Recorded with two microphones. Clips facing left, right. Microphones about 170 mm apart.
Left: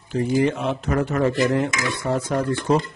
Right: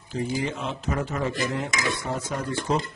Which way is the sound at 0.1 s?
60° left (ahead or behind).